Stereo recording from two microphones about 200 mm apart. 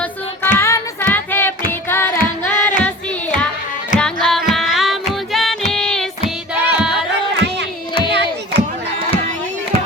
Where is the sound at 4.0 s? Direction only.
5° left (ahead or behind).